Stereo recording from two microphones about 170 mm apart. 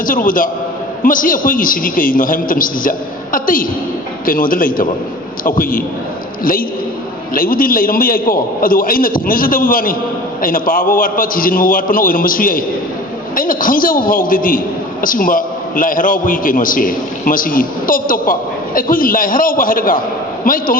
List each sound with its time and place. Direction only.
0.0 s a woman's voice: 55° left (ahead or behind)